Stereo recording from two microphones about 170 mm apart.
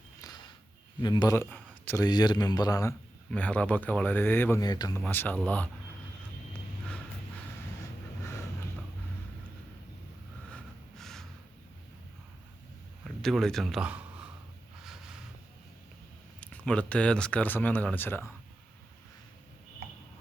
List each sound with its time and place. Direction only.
1.0 s a man's voice: 25° left (ahead or behind)
1.8 s a sound: 10° left (ahead or behind)
2.0 s a man's voice: 25° left (ahead or behind)
3.2 s speech: 10° left (ahead or behind)
4.6 s a man's voice: 20° left (ahead or behind)
5.0 s speech: 10° left (ahead or behind)
10.5 s snort: 5° left (ahead or behind)
13.1 s speech: centre (ahead or behind)
16.4 s speech: 5° left (ahead or behind)